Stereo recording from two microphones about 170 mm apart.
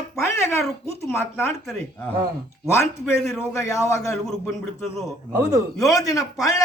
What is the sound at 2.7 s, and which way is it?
Speech, 15° left (ahead or behind).